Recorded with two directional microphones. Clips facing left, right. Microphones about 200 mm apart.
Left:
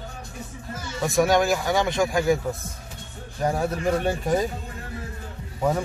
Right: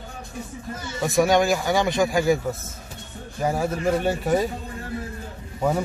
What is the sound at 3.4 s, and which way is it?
Speech, 10° right (ahead or behind).